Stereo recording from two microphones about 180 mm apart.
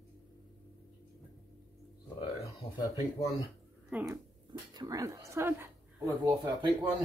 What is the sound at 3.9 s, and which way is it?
Speech, 5° right (ahead or behind).